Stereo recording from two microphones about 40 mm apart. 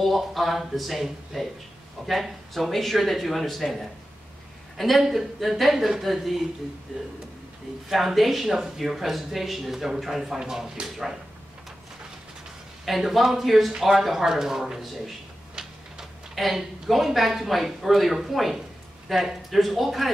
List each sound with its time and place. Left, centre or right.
0.0 s speech: centre
4.7 s speech: centre
7.9 s speech: centre
10.4 s speech: centre
12.8 s speech: centre
16.3 s speech: centre